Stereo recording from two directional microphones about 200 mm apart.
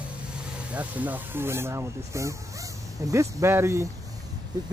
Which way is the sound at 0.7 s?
10° right (ahead or behind).